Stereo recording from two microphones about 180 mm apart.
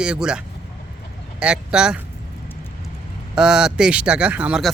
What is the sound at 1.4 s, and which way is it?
Speech, 5° right (ahead or behind).